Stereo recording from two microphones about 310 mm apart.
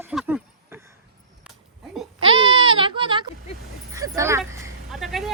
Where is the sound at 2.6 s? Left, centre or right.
Centre.